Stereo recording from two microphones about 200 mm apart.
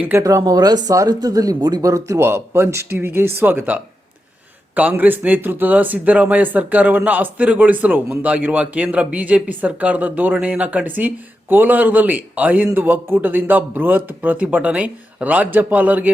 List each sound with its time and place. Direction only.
0.1 s speech: 15° right (ahead or behind)